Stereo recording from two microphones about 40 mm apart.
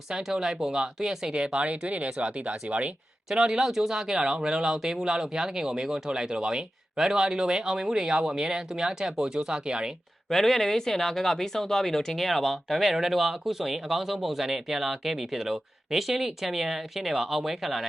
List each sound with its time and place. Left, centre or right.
0.1 s speech: centre
1.5 s speech: right
3.2 s speech: centre
10.2 s speech: centre